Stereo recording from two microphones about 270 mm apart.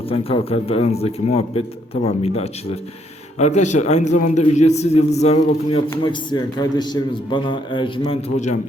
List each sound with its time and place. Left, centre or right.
0.1 s a man's voice: left